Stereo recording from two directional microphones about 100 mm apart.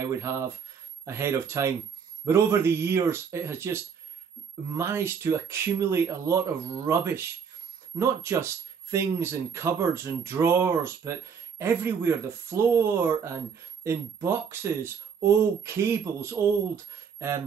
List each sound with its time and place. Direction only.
0.0 s speech: 30° right (ahead or behind)